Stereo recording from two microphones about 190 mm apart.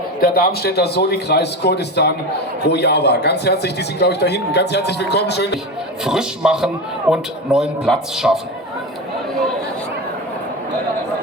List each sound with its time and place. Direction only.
0.2 s a man's voice: 55° left (ahead or behind)
6.1 s a man's voice: 5° right (ahead or behind)